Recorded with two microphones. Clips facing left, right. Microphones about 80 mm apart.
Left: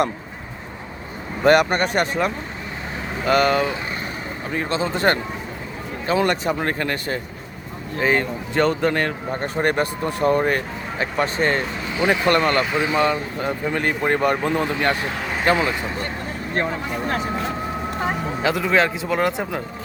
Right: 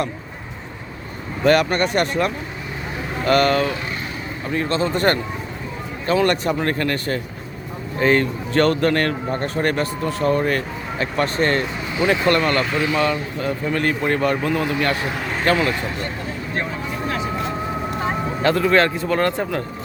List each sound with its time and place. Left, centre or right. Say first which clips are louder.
1.5 s a man's voice: even; centre
6.2 s speech: right 2 dB; centre
6.6 s a man's voice: right 2 dB; centre
12.0 s a man's voice: even; left
15.2 s vehicle: right 1 dB; centre
15.4 s a man's voice: even; centre
16.6 s speech: left 3 dB; left
18.4 s a man's voice: right 3 dB; centre